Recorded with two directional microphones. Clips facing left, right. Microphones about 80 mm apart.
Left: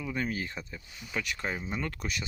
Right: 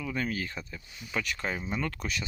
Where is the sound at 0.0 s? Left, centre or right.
Centre.